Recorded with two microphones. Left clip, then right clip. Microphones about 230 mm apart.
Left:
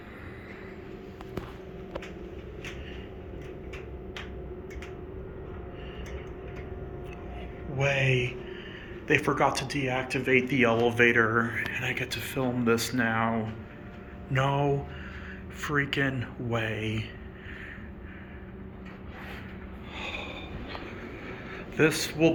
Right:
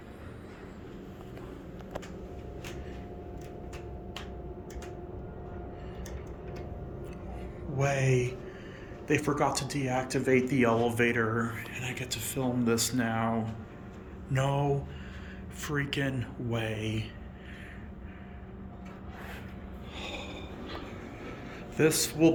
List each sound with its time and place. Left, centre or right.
7.8 s speech: centre
20.0 s snort: centre
21.8 s speech: centre